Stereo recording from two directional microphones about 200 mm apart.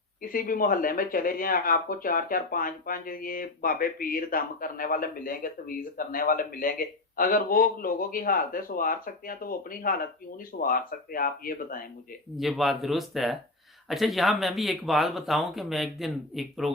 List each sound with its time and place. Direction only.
0.2 s speech: 45° left (ahead or behind)
12.4 s speech: centre (ahead or behind)